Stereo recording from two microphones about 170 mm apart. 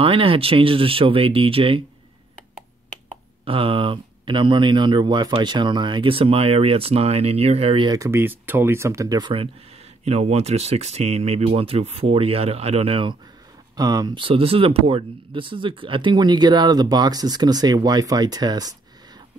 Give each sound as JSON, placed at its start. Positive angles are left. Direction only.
{"t": 0.0, "sound": "speech", "side_deg": -30}
{"t": 3.4, "sound": "speech", "side_deg": -30}
{"t": 13.7, "sound": "speech", "side_deg": -20}